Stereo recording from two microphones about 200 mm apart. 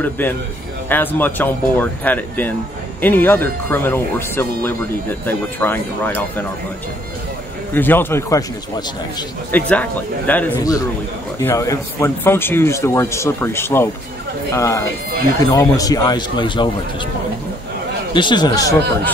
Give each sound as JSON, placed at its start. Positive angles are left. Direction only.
{"t": 0.8, "sound": "speech", "side_deg": 10}
{"t": 7.7, "sound": "speech", "side_deg": 10}
{"t": 18.1, "sound": "speech", "side_deg": 20}